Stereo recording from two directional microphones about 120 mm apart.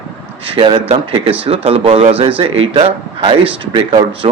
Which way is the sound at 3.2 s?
40° right (ahead or behind).